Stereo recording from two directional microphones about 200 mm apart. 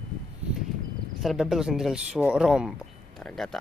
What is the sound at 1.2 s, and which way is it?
Speech, centre (ahead or behind).